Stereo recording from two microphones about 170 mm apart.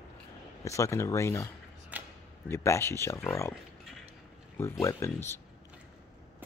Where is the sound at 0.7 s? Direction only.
15° left (ahead or behind).